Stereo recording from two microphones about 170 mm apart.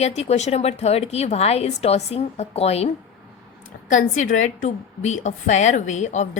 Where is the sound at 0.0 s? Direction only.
40° left (ahead or behind).